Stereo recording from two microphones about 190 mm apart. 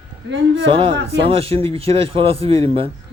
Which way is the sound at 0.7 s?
30° right (ahead or behind).